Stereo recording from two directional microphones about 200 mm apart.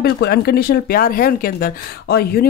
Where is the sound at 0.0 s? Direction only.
50° left (ahead or behind).